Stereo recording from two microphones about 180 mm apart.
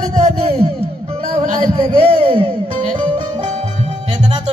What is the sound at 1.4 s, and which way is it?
Music, 45° right (ahead or behind).